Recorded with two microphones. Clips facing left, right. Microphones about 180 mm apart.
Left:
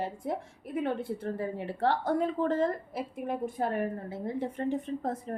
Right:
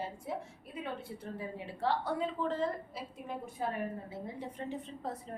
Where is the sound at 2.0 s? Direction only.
50° left (ahead or behind).